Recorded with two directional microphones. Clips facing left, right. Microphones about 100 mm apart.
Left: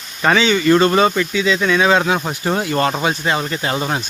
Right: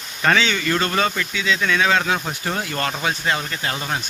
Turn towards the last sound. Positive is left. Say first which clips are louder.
# left 6 dB
turn(degrees=40)  # may be behind; listen again after turning